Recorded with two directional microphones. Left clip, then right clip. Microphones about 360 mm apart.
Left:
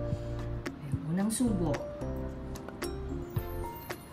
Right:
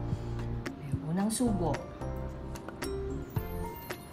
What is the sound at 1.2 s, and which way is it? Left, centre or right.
Speech, centre.